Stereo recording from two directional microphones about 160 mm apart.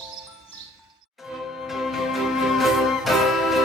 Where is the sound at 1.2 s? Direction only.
Centre (ahead or behind).